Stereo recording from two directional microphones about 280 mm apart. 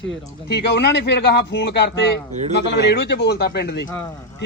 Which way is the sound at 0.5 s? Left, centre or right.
Left.